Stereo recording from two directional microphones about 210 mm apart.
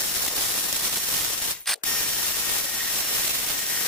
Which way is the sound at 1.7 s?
Centre (ahead or behind).